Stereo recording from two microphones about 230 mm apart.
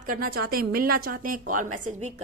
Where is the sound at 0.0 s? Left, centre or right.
Right.